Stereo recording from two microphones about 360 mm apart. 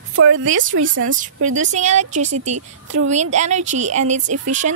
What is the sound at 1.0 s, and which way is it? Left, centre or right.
A woman's voice, right.